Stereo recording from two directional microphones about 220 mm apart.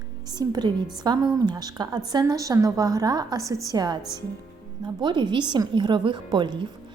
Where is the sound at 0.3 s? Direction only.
20° right (ahead or behind).